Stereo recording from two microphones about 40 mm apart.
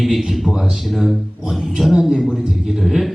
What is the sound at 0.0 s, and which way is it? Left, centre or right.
Speech, centre.